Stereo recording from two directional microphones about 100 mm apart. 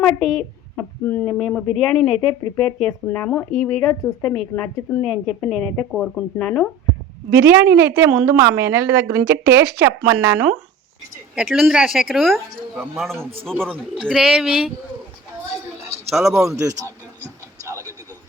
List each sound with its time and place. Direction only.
0.0 s speech: 5° left (ahead or behind)
0.8 s speech: 20° left (ahead or behind)
1.4 s speech: 5° left (ahead or behind)
4.0 s speech: 25° left (ahead or behind)
5.0 s speech: 5° left (ahead or behind)
7.3 s a woman's voice: 25° right (ahead or behind)
11.3 s a woman's voice: 5° right (ahead or behind)
13.5 s a woman's voice: 20° right (ahead or behind)
14.1 s speech: 5° right (ahead or behind)
16.1 s a woman's voice: 5° right (ahead or behind)
16.5 s a man's voice: 30° right (ahead or behind)
17.6 s a sound: 30° right (ahead or behind)